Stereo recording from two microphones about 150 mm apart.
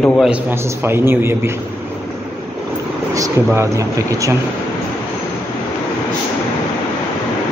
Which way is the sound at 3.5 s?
20° right (ahead or behind).